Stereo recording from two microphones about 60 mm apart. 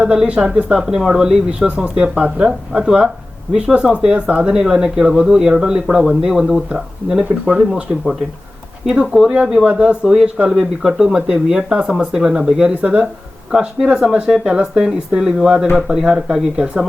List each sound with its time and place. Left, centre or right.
0.0 s speech: centre
8.9 s speech: centre
12.7 s speech: right
13.5 s speech: centre